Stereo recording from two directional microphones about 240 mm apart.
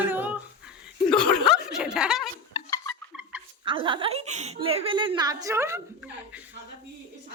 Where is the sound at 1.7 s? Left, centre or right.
Centre.